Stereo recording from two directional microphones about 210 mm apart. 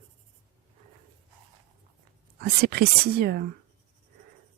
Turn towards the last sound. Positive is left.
turn(degrees=-50)  # may be behind; listen again after turning